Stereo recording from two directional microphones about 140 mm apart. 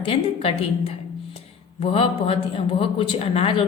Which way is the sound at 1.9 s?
45° left (ahead or behind).